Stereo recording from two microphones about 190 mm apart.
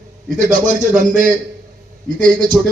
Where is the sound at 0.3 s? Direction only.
40° right (ahead or behind).